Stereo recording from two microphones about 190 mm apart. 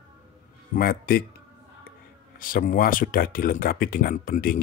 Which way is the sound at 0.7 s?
50° left (ahead or behind).